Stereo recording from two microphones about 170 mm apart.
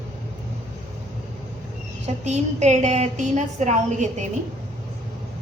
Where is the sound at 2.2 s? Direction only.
40° right (ahead or behind).